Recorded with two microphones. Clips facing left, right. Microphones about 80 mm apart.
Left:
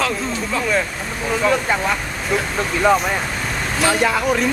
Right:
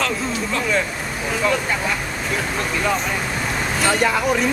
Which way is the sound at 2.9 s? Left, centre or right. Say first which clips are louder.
Left 8 dB; left.